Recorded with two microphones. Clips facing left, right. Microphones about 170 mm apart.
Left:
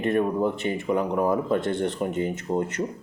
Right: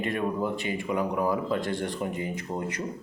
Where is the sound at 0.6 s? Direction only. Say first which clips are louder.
Left 4 dB; 40° left (ahead or behind).